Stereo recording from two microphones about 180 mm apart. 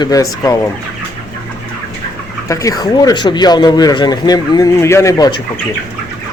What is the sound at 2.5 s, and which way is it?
Speech, 20° left (ahead or behind).